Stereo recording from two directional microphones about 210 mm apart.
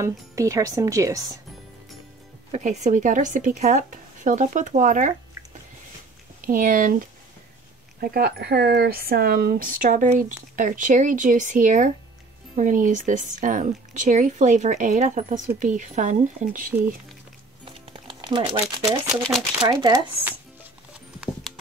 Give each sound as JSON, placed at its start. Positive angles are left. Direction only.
{"t": 0.0, "sound": "speech", "side_deg": -15}
{"t": 2.5, "sound": "speech", "side_deg": -35}
{"t": 6.4, "sound": "speech", "side_deg": -40}
{"t": 17.6, "sound": "music", "side_deg": -25}
{"t": 18.9, "sound": "speech", "side_deg": 0}
{"t": 19.7, "sound": "speech", "side_deg": -20}
{"t": 21.5, "sound": "clip-clop", "side_deg": 0}